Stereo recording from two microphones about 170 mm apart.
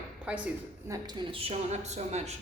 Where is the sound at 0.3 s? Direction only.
10° right (ahead or behind).